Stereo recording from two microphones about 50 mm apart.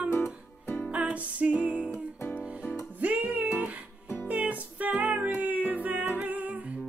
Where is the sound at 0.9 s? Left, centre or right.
Right.